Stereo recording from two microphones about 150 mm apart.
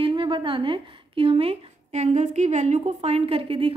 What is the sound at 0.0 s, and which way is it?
A woman's voice, 35° right (ahead or behind).